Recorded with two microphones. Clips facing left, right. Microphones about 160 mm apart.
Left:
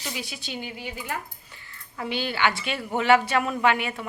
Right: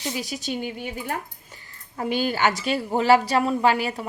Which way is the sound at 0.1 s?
40° right (ahead or behind).